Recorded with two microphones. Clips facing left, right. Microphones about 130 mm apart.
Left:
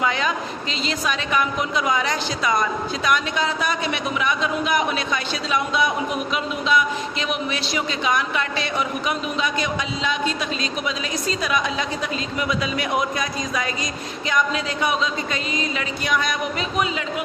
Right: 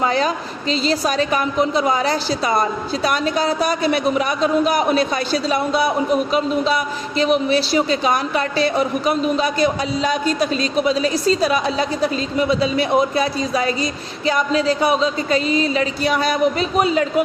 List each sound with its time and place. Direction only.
0.0 s a man's voice: 35° right (ahead or behind)